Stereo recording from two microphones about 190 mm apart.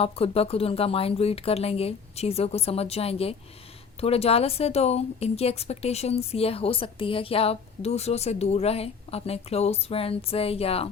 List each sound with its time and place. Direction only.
0.0 s speech: 30° left (ahead or behind)